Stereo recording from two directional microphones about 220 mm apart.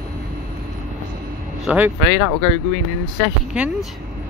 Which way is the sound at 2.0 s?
20° right (ahead or behind).